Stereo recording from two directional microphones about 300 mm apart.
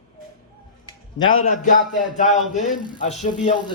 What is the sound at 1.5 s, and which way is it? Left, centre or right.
Speech, left.